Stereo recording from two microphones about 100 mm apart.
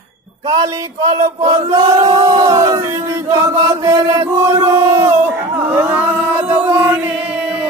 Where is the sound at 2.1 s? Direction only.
50° right (ahead or behind).